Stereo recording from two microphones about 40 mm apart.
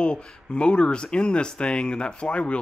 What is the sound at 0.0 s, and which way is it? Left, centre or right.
Speech, left.